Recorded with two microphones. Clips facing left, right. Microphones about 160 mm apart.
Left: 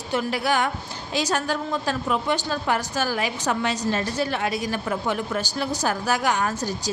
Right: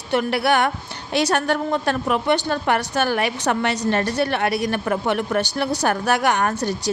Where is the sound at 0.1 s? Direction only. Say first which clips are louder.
Right 5 dB; 65° right (ahead or behind).